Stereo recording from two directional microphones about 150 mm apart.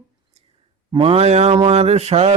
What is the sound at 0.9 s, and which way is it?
A man's voice, 35° right (ahead or behind).